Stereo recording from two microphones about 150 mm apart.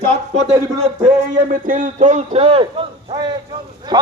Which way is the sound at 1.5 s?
60° right (ahead or behind).